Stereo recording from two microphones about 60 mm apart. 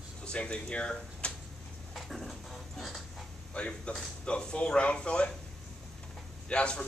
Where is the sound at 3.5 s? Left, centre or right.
Centre.